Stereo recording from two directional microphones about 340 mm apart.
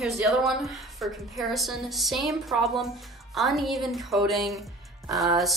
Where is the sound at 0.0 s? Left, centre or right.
Centre.